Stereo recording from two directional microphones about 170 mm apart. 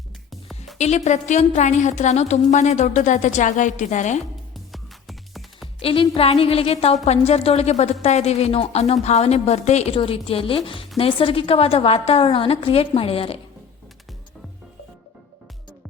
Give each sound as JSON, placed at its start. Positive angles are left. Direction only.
{"t": 0.8, "sound": "a woman's voice", "side_deg": 45}
{"t": 4.5, "sound": "music", "side_deg": 0}
{"t": 5.8, "sound": "speech", "side_deg": 30}